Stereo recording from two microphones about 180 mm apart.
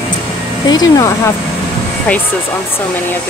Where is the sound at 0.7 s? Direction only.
20° left (ahead or behind).